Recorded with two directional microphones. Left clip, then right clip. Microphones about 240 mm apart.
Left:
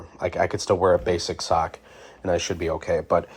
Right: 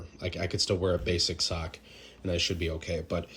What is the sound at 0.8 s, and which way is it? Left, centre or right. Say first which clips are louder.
Speech: left 9 dB; centre.